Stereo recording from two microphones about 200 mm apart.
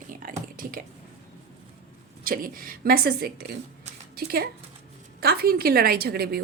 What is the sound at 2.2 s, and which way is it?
A woman's voice, 45° right (ahead or behind).